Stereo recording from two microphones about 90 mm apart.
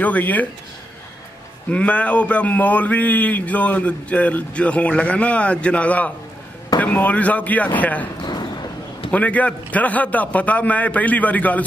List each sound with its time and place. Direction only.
0.0 s a man's voice: 20° left (ahead or behind)
1.7 s a man's voice: 15° left (ahead or behind)
9.1 s a man's voice: 15° left (ahead or behind)